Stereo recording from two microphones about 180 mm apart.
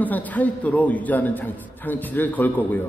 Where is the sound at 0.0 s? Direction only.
10° left (ahead or behind).